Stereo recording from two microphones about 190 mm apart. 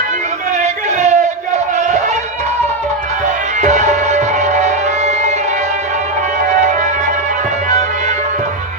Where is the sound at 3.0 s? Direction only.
40° right (ahead or behind).